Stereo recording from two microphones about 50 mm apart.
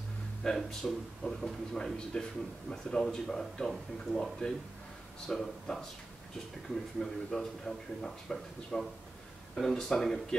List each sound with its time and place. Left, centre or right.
0.6 s speech: centre